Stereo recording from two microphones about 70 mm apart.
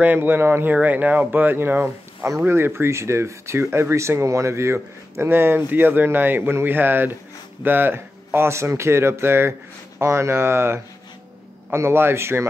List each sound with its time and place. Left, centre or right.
0.0 s speech: right